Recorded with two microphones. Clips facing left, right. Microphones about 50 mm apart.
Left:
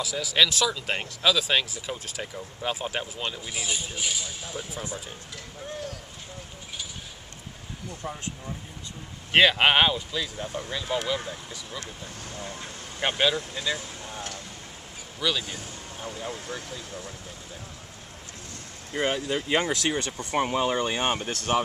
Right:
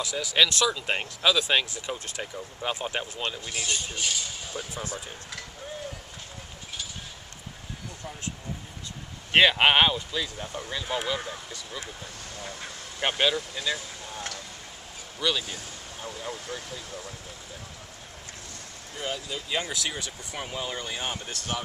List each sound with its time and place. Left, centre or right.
0.0 s speech: centre
9.3 s speech: centre
13.0 s speech: centre
15.1 s speech: centre
16.0 s speech: left
18.9 s speech: left